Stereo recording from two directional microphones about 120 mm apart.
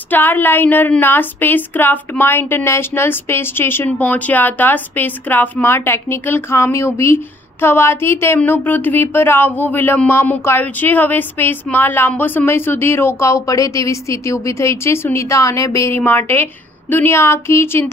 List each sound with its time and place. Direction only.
0.1 s a woman's voice: 15° left (ahead or behind)